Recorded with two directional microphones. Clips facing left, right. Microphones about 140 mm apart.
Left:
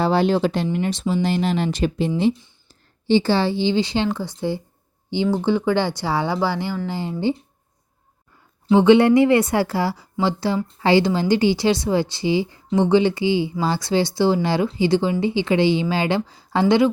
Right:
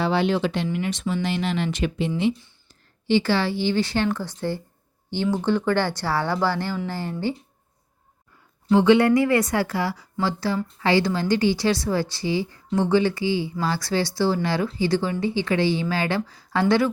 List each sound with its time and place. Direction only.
0.0 s a woman's voice: 40° left (ahead or behind); by 7.3 s 20° left (ahead or behind)
8.6 s a woman's voice: 20° left (ahead or behind)